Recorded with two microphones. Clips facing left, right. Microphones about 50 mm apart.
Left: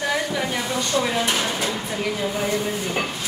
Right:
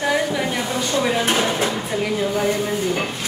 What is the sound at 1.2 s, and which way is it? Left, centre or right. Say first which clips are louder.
Speech: right 4 dB; right.